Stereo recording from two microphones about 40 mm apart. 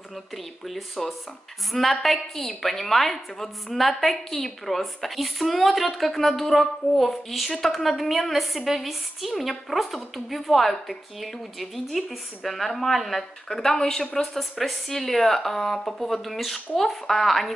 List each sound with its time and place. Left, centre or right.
0.7 s a woman's voice: centre
13.6 s a woman's voice: centre